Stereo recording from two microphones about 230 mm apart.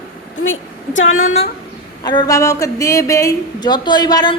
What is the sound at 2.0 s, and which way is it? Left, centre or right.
A woman's voice, centre.